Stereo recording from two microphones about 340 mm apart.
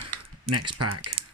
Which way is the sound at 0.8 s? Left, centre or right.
Right.